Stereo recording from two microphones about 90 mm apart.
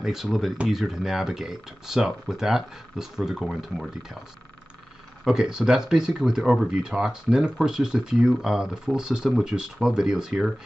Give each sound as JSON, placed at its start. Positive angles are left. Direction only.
{"t": 0.0, "sound": "speech", "side_deg": -5}
{"t": 5.2, "sound": "speech", "side_deg": -5}